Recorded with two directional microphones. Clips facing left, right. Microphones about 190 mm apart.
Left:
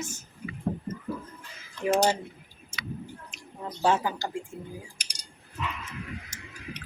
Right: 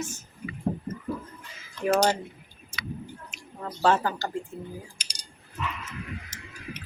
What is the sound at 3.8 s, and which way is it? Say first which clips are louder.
Speech: right 2 dB; 15° left (ahead or behind).